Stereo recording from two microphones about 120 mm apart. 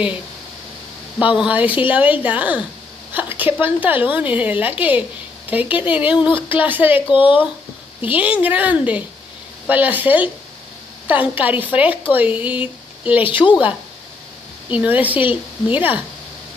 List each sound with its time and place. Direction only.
1.2 s a woman's voice: 10° right (ahead or behind)
6.1 s speech: 40° left (ahead or behind)
6.5 s a woman's voice: 15° right (ahead or behind)
7.1 s speech: 45° left (ahead or behind)
8.1 s a woman's voice: 10° right (ahead or behind)
14.7 s a woman's voice: 10° right (ahead or behind)